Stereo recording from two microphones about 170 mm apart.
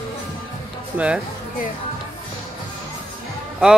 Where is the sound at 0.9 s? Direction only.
5° right (ahead or behind).